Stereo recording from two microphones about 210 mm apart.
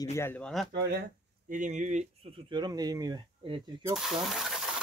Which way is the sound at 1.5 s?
35° right (ahead or behind).